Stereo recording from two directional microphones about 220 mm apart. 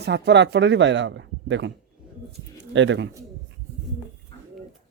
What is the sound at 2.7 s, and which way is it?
Speech, 55° right (ahead or behind).